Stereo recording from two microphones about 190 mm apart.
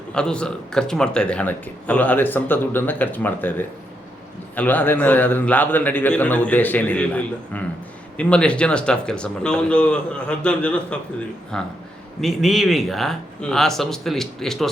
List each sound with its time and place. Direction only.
0.1 s speech: 5° left (ahead or behind)
4.5 s speech: 10° left (ahead or behind)